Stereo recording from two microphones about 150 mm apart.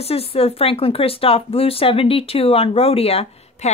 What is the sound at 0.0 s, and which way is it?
Speech, 40° left (ahead or behind).